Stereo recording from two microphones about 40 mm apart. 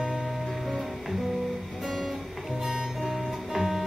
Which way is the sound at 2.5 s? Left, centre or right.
Centre.